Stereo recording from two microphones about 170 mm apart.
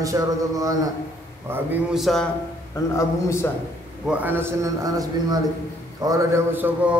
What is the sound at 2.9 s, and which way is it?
Speech, 15° left (ahead or behind).